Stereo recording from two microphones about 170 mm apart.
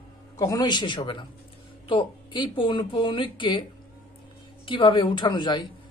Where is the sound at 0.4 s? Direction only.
20° left (ahead or behind).